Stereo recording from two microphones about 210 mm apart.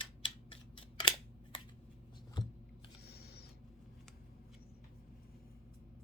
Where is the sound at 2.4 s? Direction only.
20° left (ahead or behind).